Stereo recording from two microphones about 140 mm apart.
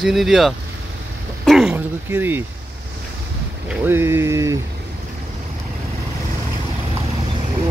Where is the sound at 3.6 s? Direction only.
15° right (ahead or behind).